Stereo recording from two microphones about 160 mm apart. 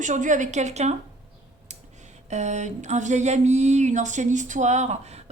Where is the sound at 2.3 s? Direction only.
45° right (ahead or behind).